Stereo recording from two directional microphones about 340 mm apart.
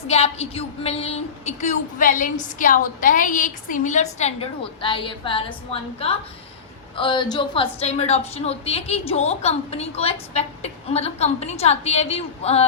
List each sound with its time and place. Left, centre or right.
0.1 s a woman's voice: centre
6.9 s a woman's voice: centre